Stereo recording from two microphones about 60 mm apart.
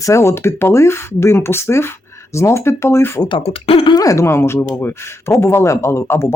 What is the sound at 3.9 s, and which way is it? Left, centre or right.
Speech, left.